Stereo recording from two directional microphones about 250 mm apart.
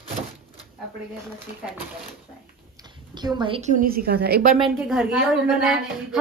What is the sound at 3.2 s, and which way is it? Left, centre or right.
A woman's voice, centre.